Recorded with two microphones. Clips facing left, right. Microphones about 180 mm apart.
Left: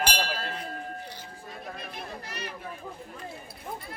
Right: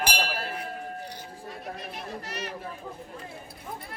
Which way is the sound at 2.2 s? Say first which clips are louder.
Right 3 dB; 75° right (ahead or behind).